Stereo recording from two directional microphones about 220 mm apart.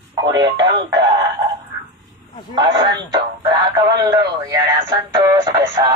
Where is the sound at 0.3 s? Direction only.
20° right (ahead or behind).